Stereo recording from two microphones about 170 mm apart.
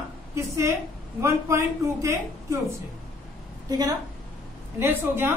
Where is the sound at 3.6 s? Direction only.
20° right (ahead or behind).